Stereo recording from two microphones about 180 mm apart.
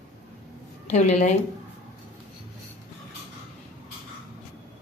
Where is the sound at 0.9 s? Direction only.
40° left (ahead or behind).